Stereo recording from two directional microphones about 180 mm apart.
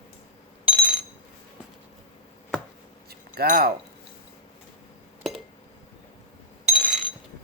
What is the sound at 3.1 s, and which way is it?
Keys jangling, 55° right (ahead or behind).